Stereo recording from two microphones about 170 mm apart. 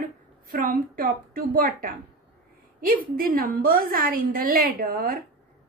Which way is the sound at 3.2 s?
60° right (ahead or behind).